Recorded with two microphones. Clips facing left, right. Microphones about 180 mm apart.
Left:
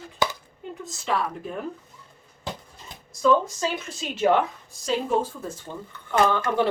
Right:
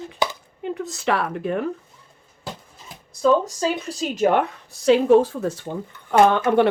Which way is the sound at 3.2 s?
35° right (ahead or behind).